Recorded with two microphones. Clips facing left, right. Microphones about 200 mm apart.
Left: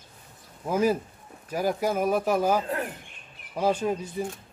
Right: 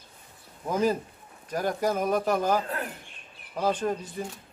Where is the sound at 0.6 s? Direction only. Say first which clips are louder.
Left 2 dB; 10° left (ahead or behind).